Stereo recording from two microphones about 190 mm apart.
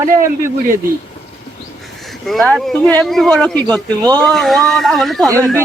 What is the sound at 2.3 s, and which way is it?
Speech, centre (ahead or behind).